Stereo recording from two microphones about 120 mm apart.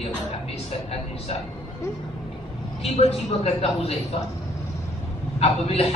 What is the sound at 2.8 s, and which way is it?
A man's voice, 60° left (ahead or behind).